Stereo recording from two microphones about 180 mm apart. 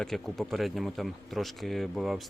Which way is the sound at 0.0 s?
Centre (ahead or behind).